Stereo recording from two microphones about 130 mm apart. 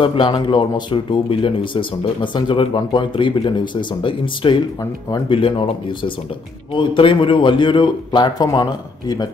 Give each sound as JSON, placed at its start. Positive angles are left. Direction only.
{"t": 0.0, "sound": "a man's voice", "side_deg": 40}